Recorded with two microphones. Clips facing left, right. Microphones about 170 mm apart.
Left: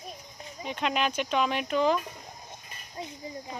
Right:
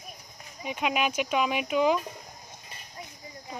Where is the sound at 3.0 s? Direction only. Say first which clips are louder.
Left 6 dB; 25° left (ahead or behind).